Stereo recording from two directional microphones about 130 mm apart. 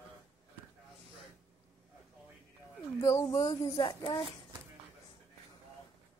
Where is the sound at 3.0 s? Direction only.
25° left (ahead or behind).